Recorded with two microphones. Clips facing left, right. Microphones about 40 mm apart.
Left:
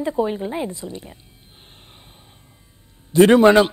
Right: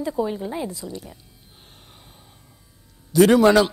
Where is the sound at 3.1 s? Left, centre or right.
Left.